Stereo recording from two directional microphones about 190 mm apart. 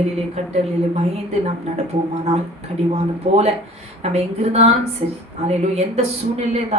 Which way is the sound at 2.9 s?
35° right (ahead or behind).